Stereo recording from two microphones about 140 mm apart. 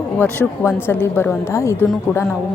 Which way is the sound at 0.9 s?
15° left (ahead or behind).